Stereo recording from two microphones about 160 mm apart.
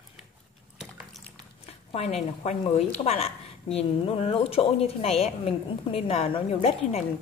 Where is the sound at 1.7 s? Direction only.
40° left (ahead or behind).